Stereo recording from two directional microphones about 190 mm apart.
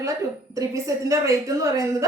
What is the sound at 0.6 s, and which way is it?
A woman's voice, 15° right (ahead or behind).